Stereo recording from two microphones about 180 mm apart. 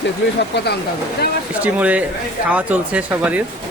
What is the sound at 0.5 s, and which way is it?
Speech, 65° left (ahead or behind).